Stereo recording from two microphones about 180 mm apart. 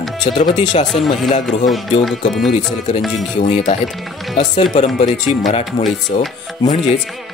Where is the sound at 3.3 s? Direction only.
35° left (ahead or behind).